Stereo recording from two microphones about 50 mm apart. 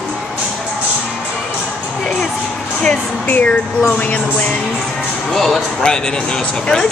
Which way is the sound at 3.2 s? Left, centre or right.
Left.